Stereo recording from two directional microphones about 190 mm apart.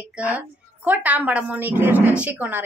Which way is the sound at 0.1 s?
5° right (ahead or behind).